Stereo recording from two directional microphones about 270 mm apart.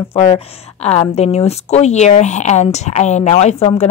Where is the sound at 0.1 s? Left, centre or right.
Centre.